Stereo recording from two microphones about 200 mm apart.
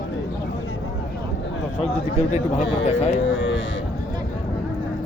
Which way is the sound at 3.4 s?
70° left (ahead or behind).